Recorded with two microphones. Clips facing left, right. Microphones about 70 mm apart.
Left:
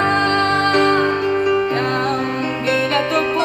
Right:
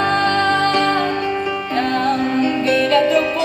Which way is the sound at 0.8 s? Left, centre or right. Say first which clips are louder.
Left 2 dB; centre.